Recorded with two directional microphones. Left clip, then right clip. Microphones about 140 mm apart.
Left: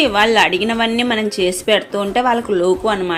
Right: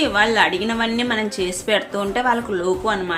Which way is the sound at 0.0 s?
35° left (ahead or behind).